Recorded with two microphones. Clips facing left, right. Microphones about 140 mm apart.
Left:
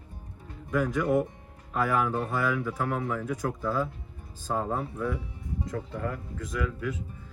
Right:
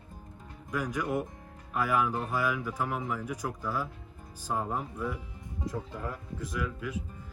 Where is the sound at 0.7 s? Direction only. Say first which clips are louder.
Left 6 dB; 20° right (ahead or behind).